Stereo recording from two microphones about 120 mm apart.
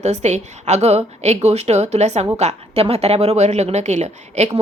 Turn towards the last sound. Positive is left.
turn(degrees=-70)  # may be behind; listen again after turning